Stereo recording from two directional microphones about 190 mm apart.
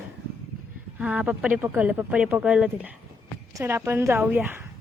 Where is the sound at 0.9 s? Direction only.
5° right (ahead or behind).